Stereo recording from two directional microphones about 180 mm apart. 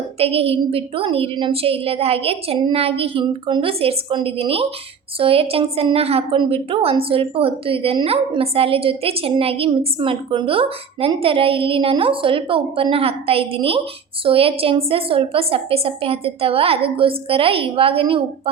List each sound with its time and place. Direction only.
0.2 s a woman's voice: 35° right (ahead or behind)